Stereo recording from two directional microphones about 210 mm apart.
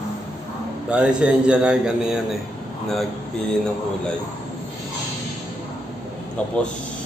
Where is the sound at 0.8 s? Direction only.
5° right (ahead or behind).